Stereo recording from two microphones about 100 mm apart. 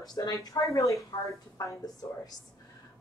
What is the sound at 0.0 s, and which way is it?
Speech, 40° left (ahead or behind).